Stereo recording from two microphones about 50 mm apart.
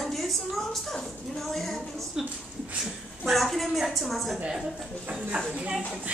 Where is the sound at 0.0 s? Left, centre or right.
Centre.